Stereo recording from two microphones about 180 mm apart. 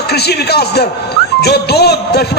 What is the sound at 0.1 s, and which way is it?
A man's voice, 65° left (ahead or behind).